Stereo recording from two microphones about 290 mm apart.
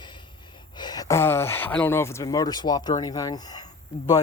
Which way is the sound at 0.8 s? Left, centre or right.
Centre.